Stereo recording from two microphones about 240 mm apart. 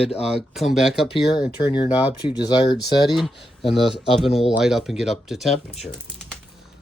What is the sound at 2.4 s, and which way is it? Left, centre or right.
Speech, centre.